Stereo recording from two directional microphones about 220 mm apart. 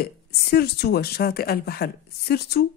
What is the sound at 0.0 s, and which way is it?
A woman's voice, 45° left (ahead or behind).